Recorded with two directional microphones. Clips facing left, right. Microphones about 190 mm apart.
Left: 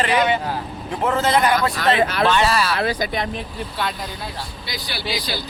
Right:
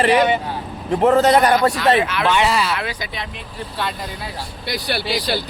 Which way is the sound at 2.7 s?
40° left (ahead or behind).